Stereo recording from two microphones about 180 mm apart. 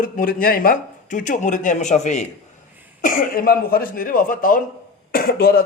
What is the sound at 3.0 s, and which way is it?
Speech, 55° left (ahead or behind).